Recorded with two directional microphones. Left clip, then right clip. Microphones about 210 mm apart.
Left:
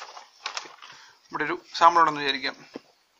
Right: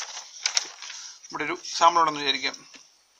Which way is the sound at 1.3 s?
35° right (ahead or behind).